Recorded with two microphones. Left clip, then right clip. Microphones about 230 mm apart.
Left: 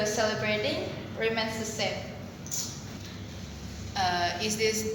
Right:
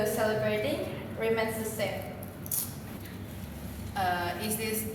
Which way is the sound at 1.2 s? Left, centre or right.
Centre.